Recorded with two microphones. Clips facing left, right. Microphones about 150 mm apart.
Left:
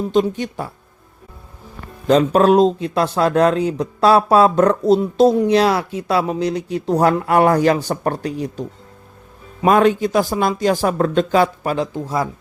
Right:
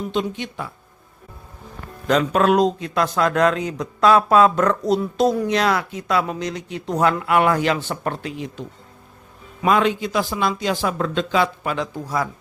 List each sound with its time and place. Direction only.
0.1 s speech: 40° left (ahead or behind)
2.0 s speech: 30° left (ahead or behind)
9.6 s speech: 45° left (ahead or behind)
11.9 s speech: 25° left (ahead or behind)